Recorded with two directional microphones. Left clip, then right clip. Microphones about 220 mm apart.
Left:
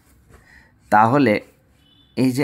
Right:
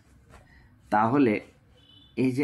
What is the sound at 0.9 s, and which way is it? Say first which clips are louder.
Speech: left 8 dB; 45° left (ahead or behind).